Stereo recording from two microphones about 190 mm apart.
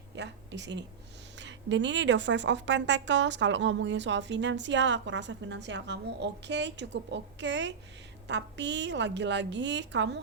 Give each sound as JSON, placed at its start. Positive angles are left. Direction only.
{"t": 0.2, "sound": "speech", "side_deg": -65}